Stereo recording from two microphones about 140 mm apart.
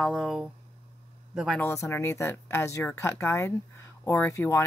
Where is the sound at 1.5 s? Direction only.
20° left (ahead or behind).